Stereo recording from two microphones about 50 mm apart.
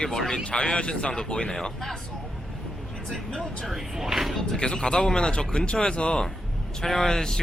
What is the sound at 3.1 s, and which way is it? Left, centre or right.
Speech, centre.